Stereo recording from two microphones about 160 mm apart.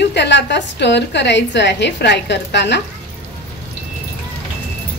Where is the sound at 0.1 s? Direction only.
90° left.